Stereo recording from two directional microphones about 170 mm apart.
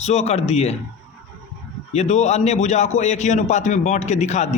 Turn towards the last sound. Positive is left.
turn(degrees=45)  # may be behind; listen again after turning